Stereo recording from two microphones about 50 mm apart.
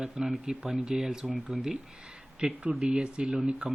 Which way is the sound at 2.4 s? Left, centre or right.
Centre.